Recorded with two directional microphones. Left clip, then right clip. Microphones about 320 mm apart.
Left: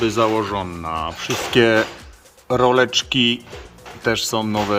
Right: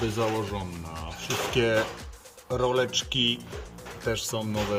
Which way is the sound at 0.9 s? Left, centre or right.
Left.